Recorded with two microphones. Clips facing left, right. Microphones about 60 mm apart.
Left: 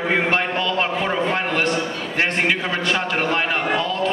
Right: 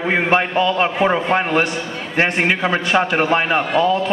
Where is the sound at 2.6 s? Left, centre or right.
Right.